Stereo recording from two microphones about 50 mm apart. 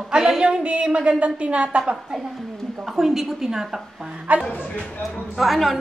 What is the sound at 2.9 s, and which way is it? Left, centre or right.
Speech, centre.